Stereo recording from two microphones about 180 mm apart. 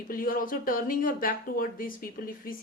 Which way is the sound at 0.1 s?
50° left (ahead or behind).